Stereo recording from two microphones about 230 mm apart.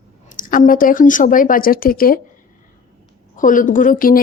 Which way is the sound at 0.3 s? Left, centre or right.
Left.